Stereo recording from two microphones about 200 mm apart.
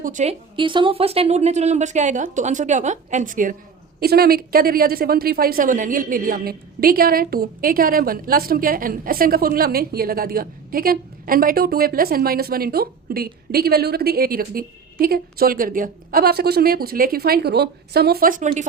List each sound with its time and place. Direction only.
0.0 s speech: 40° right (ahead or behind)
0.5 s a woman's voice: 25° right (ahead or behind); by 18.6 s 40° right (ahead or behind)